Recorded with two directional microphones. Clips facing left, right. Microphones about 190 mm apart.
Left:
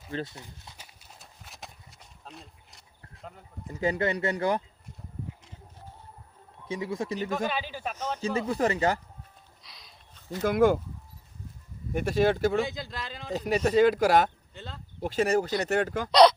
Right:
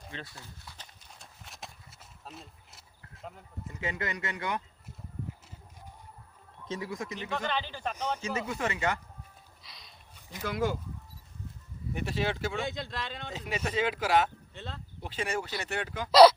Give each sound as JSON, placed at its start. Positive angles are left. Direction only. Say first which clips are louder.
{"t": 0.3, "sound": "speech", "louder": "left 3 dB", "side_deg": 20}
{"t": 0.8, "sound": "horse", "louder": "left 1 dB", "side_deg": 0}
{"t": 3.7, "sound": "speech", "louder": "left 9 dB", "side_deg": 35}
{"t": 6.7, "sound": "speech", "louder": "left 5 dB", "side_deg": 20}
{"t": 7.3, "sound": "speech", "louder": "left 3 dB", "side_deg": 5}
{"t": 8.2, "sound": "speech", "louder": "left 6 dB", "side_deg": 30}
{"t": 9.6, "sound": "a sound", "louder": "even", "side_deg": 0}
{"t": 10.4, "sound": "speech", "louder": "left 9 dB", "side_deg": 55}
{"t": 11.9, "sound": "speech", "louder": "left 8 dB", "side_deg": 45}
{"t": 12.6, "sound": "speech", "louder": "even", "side_deg": 0}
{"t": 13.5, "sound": "speech", "louder": "left 10 dB", "side_deg": 40}
{"t": 14.5, "sound": "speech", "louder": "even", "side_deg": 0}
{"t": 15.0, "sound": "speech", "louder": "left 9 dB", "side_deg": 40}